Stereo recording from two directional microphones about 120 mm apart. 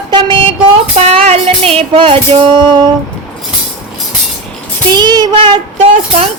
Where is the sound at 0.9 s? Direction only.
65° right (ahead or behind); by 2.9 s 40° right (ahead or behind).